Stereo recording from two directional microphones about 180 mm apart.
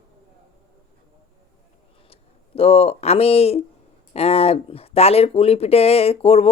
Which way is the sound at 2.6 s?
35° left (ahead or behind).